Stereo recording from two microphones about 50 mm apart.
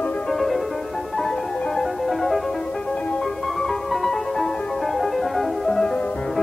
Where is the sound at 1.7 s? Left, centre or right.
Centre.